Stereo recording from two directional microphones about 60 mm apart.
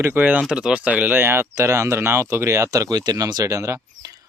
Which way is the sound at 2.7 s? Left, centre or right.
Right.